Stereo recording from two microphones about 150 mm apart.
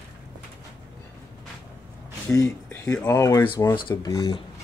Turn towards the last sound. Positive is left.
turn(degrees=30)  # may be behind; listen again after turning